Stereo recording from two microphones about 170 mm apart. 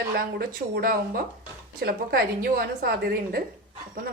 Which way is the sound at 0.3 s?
60° right (ahead or behind).